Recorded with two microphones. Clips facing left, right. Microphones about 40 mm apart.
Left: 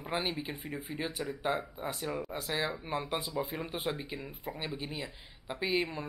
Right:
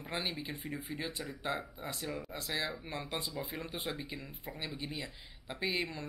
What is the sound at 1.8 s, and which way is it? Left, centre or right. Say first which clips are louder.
Speech: left 4 dB; left.